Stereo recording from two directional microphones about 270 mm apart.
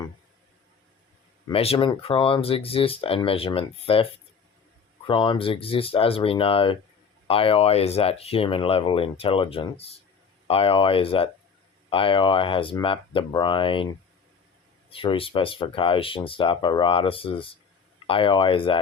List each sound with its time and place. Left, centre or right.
1.5 s speech: left
14.8 s speech: centre